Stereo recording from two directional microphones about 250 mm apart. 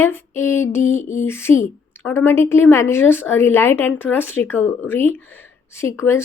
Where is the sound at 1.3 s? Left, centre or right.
Centre.